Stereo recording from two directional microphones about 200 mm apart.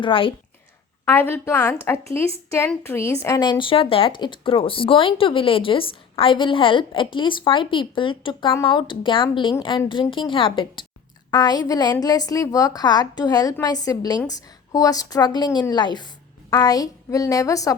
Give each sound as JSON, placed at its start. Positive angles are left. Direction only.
{"t": 0.0, "sound": "a woman's voice", "side_deg": 25}
{"t": 1.0, "sound": "a woman's voice", "side_deg": 10}